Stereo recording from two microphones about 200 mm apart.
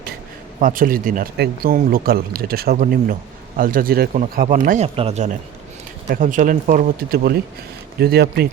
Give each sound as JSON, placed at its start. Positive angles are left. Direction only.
{"t": 0.6, "sound": "speech", "side_deg": -45}